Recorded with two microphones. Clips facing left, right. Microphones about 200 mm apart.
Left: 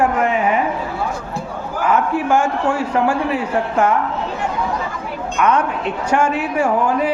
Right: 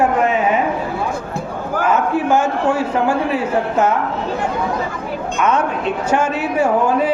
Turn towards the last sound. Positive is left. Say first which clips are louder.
# right 2 dB
turn(degrees=-25)  # may be behind; listen again after turning